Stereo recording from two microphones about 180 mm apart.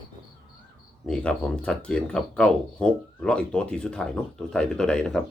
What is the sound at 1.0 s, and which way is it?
Speech, 5° left (ahead or behind).